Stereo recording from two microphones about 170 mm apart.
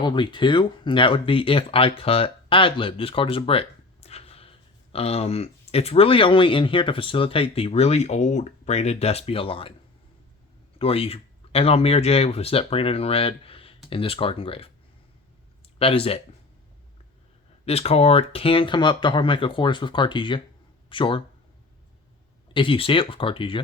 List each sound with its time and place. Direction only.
0.0 s speech: 25° left (ahead or behind)
10.8 s speech: 35° left (ahead or behind)
15.8 s speech: 35° left (ahead or behind)
17.7 s speech: 35° left (ahead or behind)
22.5 s speech: 30° left (ahead or behind)